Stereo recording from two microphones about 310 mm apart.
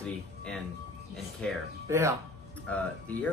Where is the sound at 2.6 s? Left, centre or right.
Centre.